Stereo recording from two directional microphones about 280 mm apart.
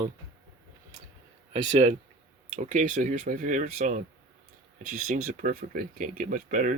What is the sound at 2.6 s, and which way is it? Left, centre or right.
Speech, right.